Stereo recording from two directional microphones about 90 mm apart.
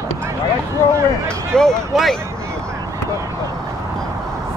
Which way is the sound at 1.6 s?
5° left (ahead or behind).